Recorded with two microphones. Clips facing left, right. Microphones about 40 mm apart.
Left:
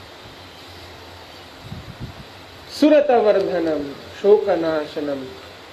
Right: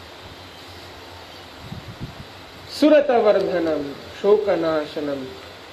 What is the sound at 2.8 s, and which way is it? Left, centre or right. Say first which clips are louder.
A woman's voice: left 1 dB; centre.